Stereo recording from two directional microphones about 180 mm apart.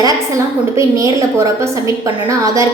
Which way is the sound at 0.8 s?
15° right (ahead or behind).